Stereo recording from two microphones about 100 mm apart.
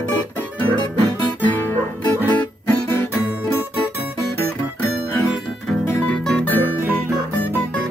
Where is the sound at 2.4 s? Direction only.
20° left (ahead or behind).